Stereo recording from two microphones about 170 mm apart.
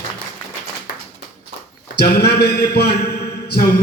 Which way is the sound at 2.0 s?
75° left (ahead or behind).